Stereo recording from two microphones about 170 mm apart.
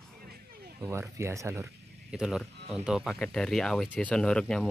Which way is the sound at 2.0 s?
5° right (ahead or behind).